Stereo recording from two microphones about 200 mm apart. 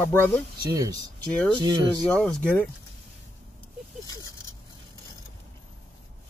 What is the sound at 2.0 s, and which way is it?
Speech, 5° left (ahead or behind).